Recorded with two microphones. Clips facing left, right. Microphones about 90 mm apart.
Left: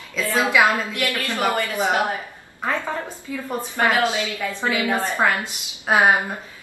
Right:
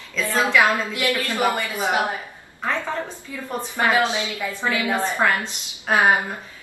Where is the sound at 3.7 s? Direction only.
15° right (ahead or behind).